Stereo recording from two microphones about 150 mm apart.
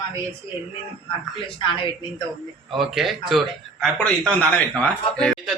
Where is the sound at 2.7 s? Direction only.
Centre (ahead or behind).